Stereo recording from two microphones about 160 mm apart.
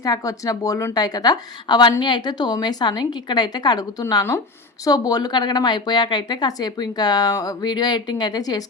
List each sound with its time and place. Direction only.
0.0 s a woman's voice: 20° left (ahead or behind)